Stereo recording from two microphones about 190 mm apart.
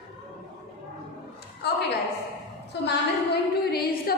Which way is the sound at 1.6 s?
60° left (ahead or behind).